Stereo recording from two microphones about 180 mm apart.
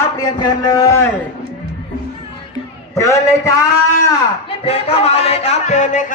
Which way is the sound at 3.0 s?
15° left (ahead or behind).